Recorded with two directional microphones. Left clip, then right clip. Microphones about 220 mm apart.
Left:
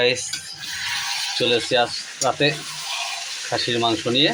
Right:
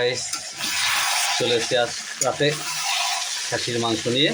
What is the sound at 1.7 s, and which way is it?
Speech, 10° right (ahead or behind).